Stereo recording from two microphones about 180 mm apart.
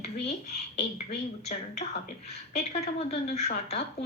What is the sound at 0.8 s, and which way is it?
Speech, 70° left (ahead or behind).